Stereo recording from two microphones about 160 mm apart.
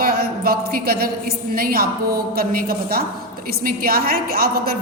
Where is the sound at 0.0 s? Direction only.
70° right (ahead or behind).